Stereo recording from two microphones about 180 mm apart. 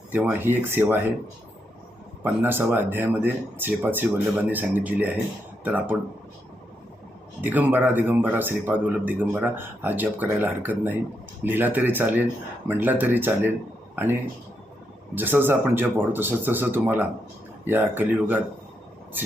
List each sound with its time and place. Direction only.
0.1 s speech: 10° right (ahead or behind)
2.2 s speech: 10° right (ahead or behind)
7.4 s speech: 10° right (ahead or behind)